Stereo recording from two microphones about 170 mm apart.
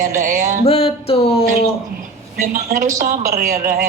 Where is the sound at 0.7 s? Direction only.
35° left (ahead or behind).